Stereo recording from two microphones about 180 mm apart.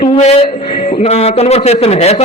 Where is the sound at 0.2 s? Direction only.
40° left (ahead or behind).